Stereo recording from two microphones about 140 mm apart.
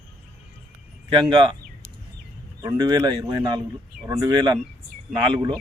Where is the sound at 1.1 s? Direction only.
35° right (ahead or behind).